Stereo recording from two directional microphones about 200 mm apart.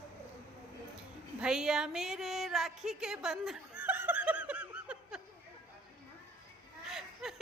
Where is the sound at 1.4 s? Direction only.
5° right (ahead or behind).